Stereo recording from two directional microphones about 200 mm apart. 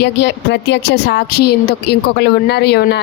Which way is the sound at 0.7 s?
55° left (ahead or behind).